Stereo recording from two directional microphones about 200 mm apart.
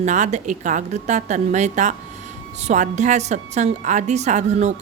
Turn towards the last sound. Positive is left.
turn(degrees=-35)  # may be behind; listen again after turning